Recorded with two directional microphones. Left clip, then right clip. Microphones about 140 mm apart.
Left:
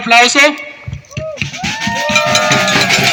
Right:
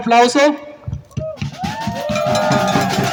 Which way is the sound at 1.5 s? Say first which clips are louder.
Left 7 dB; 15° left (ahead or behind).